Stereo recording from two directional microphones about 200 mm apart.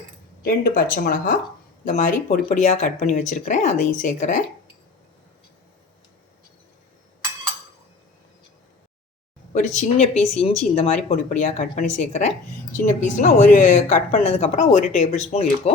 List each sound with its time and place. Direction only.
0.4 s speech: 45° left (ahead or behind)
9.5 s speech: 35° left (ahead or behind)